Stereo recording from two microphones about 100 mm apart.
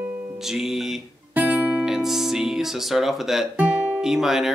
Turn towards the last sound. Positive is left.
turn(degrees=-5)  # may be behind; listen again after turning